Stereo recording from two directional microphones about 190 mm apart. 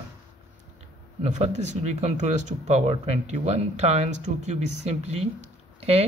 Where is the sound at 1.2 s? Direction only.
35° right (ahead or behind).